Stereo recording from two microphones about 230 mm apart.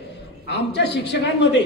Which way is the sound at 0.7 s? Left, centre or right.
Left.